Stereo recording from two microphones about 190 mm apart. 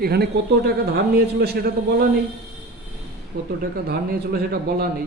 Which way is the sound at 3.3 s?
45° right (ahead or behind).